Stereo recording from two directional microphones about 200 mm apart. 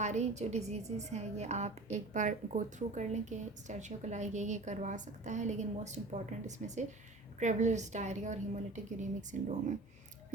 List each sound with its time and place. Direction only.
0.0 s a woman's voice: 35° right (ahead or behind)